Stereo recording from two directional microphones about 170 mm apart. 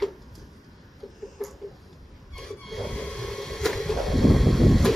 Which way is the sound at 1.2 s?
Centre (ahead or behind).